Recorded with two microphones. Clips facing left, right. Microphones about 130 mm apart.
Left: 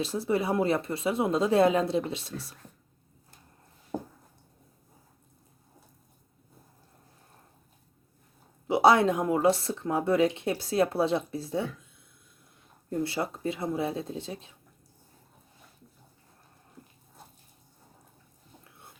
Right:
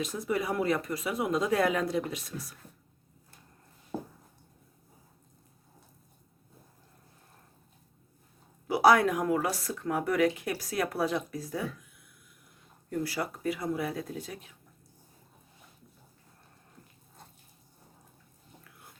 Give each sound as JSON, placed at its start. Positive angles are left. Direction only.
{"t": 0.0, "sound": "speech", "side_deg": 30}
{"t": 8.6, "sound": "speech", "side_deg": 25}
{"t": 16.8, "sound": "water", "side_deg": 10}